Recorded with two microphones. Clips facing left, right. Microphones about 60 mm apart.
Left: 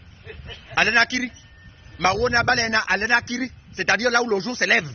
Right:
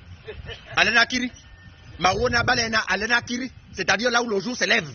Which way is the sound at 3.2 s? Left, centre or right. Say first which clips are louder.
Left 2 dB; left.